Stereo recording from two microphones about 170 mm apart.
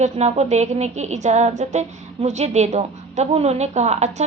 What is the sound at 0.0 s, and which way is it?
A woman's voice, 40° right (ahead or behind).